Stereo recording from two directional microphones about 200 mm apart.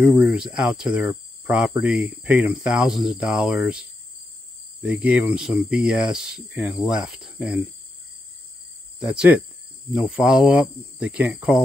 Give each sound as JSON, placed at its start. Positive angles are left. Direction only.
{"t": 0.0, "sound": "speech", "side_deg": 0}
{"t": 4.8, "sound": "speech", "side_deg": -5}
{"t": 9.0, "sound": "speech", "side_deg": -5}